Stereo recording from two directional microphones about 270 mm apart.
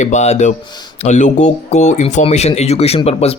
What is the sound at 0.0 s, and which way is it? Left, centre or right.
Speech, left.